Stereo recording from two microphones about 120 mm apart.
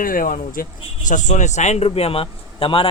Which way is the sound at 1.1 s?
90° left.